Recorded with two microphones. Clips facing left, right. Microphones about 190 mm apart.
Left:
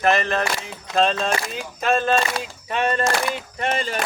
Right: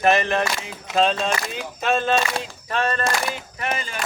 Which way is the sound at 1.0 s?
Centre (ahead or behind).